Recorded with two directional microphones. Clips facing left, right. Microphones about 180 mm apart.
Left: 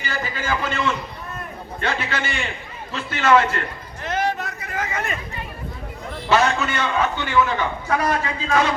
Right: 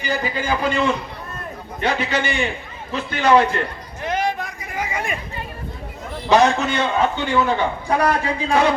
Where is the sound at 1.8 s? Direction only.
15° right (ahead or behind).